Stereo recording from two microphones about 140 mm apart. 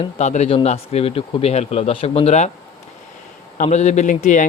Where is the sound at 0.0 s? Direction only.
55° left (ahead or behind).